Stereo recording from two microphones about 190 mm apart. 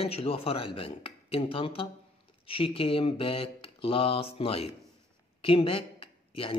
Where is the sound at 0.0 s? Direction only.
30° left (ahead or behind).